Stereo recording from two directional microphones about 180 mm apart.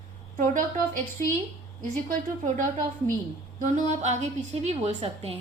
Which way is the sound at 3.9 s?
40° right (ahead or behind).